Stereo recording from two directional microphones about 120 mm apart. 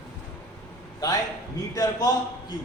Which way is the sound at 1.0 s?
35° left (ahead or behind).